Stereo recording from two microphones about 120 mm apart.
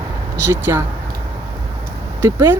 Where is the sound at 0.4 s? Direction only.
20° right (ahead or behind).